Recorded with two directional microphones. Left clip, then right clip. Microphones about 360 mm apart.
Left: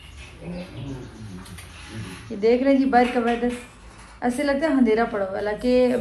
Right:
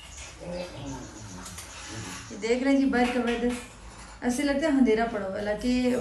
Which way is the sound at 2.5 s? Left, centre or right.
Centre.